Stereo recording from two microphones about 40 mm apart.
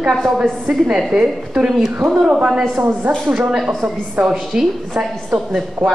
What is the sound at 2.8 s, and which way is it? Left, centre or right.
Speech, right.